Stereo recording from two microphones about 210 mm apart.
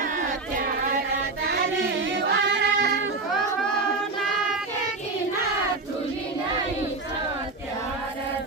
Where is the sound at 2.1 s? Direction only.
55° right (ahead or behind).